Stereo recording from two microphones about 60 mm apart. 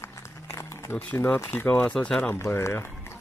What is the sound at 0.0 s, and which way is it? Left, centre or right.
Run, left.